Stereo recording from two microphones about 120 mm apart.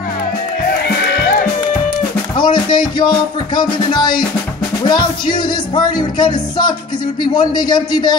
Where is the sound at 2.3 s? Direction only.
40° left (ahead or behind).